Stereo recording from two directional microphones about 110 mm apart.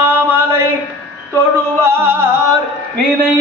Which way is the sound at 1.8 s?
20° right (ahead or behind).